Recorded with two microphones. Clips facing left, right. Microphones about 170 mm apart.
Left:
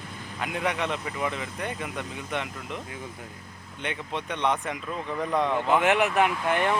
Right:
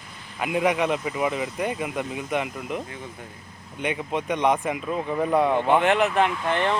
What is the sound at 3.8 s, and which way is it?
Speech, 10° right (ahead or behind).